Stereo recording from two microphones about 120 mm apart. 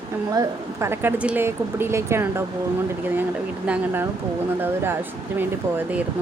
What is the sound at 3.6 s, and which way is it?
A woman's voice, 15° right (ahead or behind).